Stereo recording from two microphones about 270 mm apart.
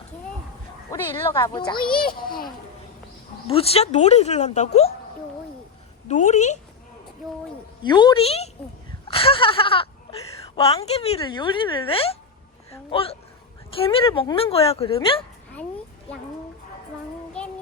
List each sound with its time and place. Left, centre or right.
0.9 s speech: centre
1.8 s a child's voice: left
3.5 s a woman's voice: left
6.1 s a woman's voice: left
7.8 s a woman's voice: centre